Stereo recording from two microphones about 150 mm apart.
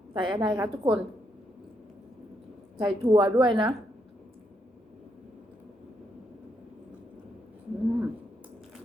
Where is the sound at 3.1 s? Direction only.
35° right (ahead or behind).